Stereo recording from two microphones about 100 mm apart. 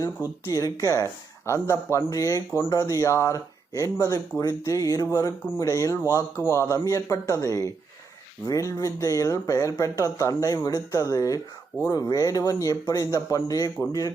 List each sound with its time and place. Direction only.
0.4 s a man's voice: 35° left (ahead or behind)